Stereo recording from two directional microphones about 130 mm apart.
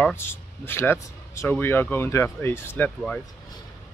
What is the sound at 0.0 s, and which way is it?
Speech, 15° left (ahead or behind).